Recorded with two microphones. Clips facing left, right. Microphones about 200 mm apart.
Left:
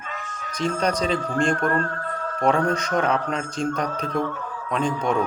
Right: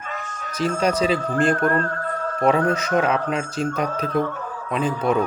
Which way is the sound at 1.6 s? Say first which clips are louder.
Right 2 dB; 40° right (ahead or behind).